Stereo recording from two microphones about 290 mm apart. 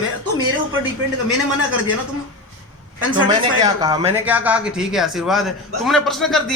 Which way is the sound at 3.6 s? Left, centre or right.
Centre.